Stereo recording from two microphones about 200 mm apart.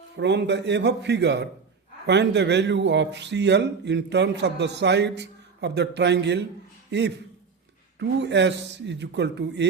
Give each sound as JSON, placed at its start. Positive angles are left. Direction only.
{"t": 0.2, "sound": "a man's voice", "side_deg": -60}